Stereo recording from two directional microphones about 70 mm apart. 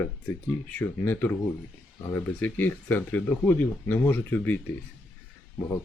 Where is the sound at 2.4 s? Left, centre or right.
Left.